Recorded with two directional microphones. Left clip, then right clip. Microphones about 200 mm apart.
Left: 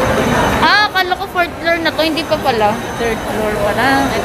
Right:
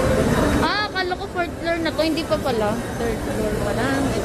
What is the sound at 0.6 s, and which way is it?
Speech, 5° left (ahead or behind).